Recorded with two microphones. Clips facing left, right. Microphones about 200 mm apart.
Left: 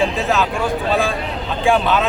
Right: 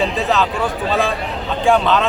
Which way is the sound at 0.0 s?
Centre (ahead or behind).